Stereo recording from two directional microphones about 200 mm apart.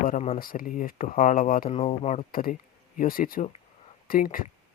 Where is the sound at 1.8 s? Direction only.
30° left (ahead or behind).